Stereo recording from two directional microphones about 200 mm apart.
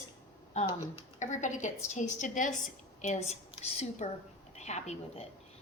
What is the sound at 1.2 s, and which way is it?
A woman's voice, 35° left (ahead or behind).